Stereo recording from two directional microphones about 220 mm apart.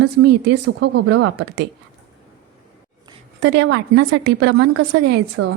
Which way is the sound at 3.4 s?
55° right (ahead or behind).